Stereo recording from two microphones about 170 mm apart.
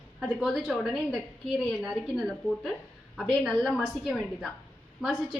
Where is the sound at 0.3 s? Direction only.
Centre (ahead or behind).